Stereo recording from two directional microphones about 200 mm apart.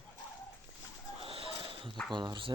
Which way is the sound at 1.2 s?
30° right (ahead or behind).